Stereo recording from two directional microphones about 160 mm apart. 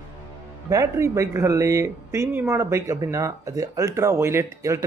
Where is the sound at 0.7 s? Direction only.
20° right (ahead or behind).